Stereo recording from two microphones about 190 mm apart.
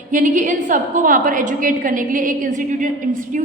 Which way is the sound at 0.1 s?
45° right (ahead or behind).